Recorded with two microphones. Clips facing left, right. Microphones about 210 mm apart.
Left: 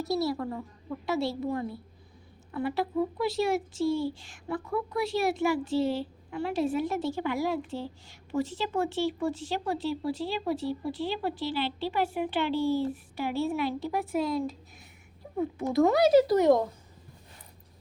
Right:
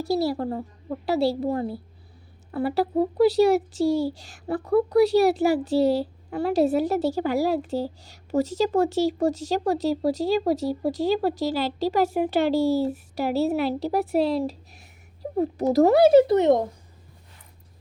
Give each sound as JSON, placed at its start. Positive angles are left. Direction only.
{"t": 0.1, "sound": "a child's voice", "side_deg": -30}